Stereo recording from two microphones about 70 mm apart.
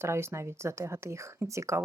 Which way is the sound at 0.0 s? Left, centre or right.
Right.